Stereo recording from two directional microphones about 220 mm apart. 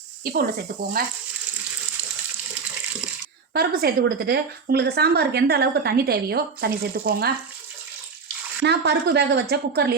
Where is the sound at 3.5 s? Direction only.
45° right (ahead or behind).